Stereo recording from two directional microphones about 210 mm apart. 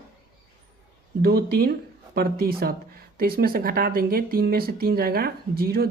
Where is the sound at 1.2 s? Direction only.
45° right (ahead or behind).